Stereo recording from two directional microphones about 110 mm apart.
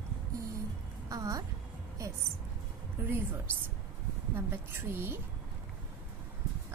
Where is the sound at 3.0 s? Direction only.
25° right (ahead or behind).